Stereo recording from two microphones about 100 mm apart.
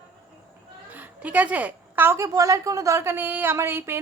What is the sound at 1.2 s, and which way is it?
A woman's voice, 15° right (ahead or behind).